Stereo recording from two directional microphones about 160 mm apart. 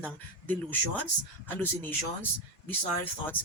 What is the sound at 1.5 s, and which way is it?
Speech, 10° left (ahead or behind).